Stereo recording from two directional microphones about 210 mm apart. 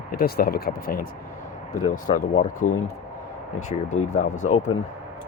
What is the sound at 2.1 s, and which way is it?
Speech, 40° left (ahead or behind).